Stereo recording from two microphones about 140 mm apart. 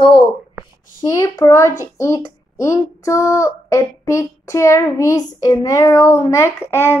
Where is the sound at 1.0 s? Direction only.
25° left (ahead or behind).